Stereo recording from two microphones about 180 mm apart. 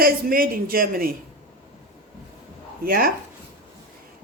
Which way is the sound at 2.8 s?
55° right (ahead or behind).